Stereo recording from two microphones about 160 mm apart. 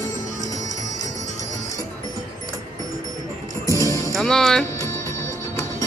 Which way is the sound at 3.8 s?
20° left (ahead or behind).